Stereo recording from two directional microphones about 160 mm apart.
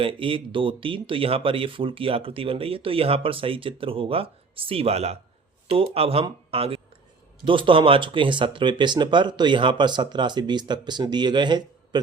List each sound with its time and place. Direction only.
0.0 s speech: 35° right (ahead or behind)
6.5 s a sound: 35° right (ahead or behind)
7.4 s speech: 30° right (ahead or behind)